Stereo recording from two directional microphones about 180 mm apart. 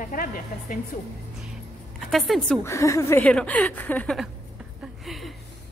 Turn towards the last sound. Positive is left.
turn(degrees=0)  # may be behind; listen again after turning